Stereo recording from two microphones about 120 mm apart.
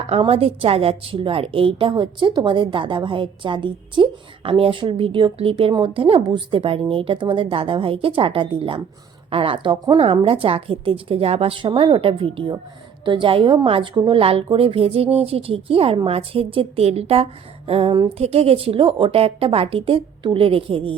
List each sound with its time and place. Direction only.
0.1 s a woman's voice: 55° right (ahead or behind)
10.0 s a woman's voice: 50° right (ahead or behind)